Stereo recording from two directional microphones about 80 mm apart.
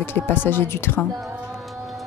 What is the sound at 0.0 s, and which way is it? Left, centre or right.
Speech, left.